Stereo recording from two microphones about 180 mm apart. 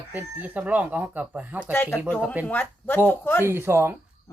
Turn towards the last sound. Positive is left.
turn(degrees=-15)  # may be behind; listen again after turning